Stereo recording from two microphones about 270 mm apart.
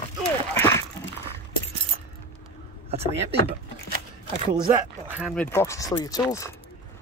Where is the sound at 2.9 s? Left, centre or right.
Right.